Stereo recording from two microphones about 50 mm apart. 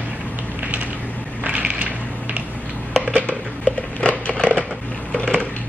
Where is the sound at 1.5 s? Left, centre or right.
Right.